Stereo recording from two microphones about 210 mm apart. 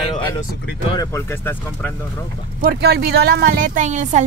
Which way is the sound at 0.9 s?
15° left (ahead or behind).